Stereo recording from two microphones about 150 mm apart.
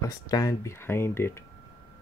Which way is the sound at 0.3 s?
20° left (ahead or behind).